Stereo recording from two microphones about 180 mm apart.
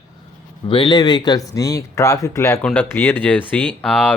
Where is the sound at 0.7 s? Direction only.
25° left (ahead or behind).